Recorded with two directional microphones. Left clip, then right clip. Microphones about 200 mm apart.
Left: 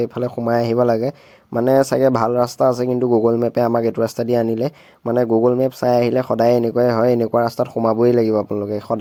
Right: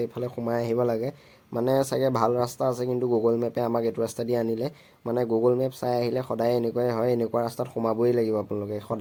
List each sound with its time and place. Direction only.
0.0 s speech: 40° left (ahead or behind)